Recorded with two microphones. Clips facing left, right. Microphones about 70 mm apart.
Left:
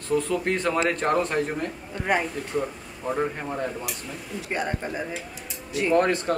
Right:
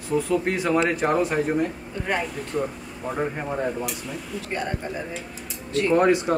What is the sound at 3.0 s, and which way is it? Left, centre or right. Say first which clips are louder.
Speech: even; centre.